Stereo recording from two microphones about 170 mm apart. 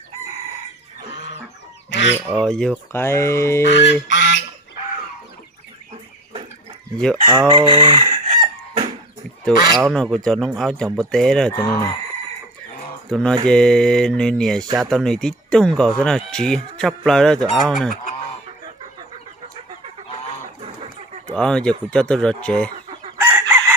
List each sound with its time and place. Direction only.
1.1 s chicken: 90° left
1.9 s fowl: 90° left
2.3 s speech: 5° left (ahead or behind)
2.9 s mantra: 15° left (ahead or behind)
3.6 s goose: 90° left
4.1 s duck: 90° left
6.9 s speech: 5° left (ahead or behind)
7.3 s chicken: 30° right (ahead or behind)
9.8 s speech: centre (ahead or behind)
11.5 s speech: 20° left (ahead or behind)
13.1 s mantra: 5° left (ahead or behind)
13.5 s speech: 5° left (ahead or behind)
21.2 s speech: 5° left (ahead or behind)
23.2 s chicken: 10° right (ahead or behind)